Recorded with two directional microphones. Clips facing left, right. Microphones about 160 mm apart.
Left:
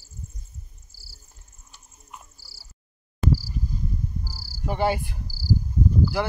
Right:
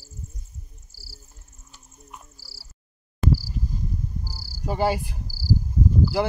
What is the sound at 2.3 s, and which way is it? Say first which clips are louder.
Frog: right 4 dB; 90° right.